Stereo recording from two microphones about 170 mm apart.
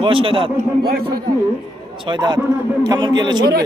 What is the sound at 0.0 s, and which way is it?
Speech, 30° right (ahead or behind).